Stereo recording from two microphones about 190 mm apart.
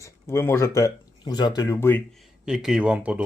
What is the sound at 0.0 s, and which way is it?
Speech, 15° left (ahead or behind).